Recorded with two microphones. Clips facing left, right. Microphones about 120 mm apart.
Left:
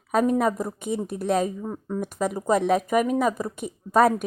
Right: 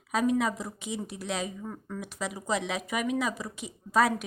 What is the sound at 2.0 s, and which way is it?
Speech, 45° left (ahead or behind).